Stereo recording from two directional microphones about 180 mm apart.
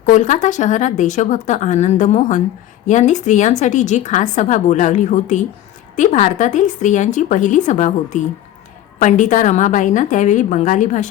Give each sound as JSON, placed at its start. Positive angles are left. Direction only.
{"t": 0.0, "sound": "a woman's voice", "side_deg": 45}